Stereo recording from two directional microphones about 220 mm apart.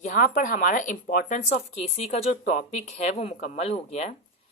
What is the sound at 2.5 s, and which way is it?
Speech, 30° left (ahead or behind).